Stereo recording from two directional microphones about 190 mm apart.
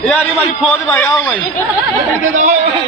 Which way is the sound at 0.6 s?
5° left (ahead or behind).